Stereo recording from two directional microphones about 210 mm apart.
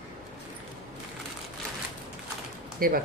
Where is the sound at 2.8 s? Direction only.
45° right (ahead or behind).